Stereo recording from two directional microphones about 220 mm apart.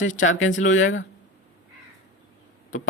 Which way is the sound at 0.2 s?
60° left (ahead or behind).